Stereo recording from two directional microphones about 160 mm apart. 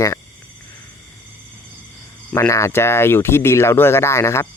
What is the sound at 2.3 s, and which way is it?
Speech, 15° left (ahead or behind).